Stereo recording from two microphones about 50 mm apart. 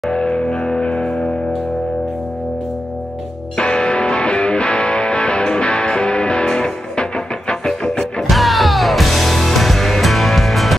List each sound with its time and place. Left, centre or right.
0.1 s music: centre
3.5 s music: centre
8.3 s music: centre